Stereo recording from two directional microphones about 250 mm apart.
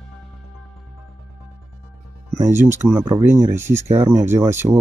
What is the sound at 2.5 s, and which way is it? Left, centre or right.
Speech, centre.